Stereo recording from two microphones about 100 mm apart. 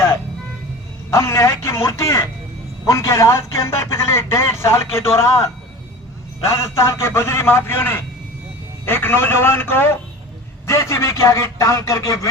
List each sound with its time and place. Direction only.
1.1 s a man's voice: 25° left (ahead or behind)